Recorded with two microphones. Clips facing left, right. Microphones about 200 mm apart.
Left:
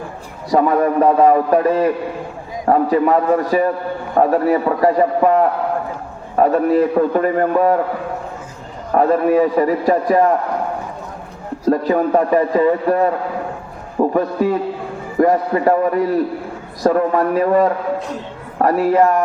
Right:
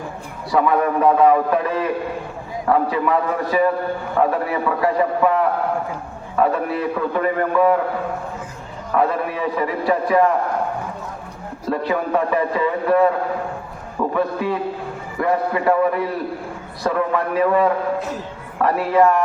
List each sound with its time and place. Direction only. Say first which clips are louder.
0.5 s a man's voice: left 3 dB; 40° left (ahead or behind)
9.0 s a man's voice: left 7 dB; 45° left (ahead or behind)
11.7 s a man's voice: left 5 dB; 40° left (ahead or behind)
14.1 s a man's voice: left 2 dB; 40° left (ahead or behind)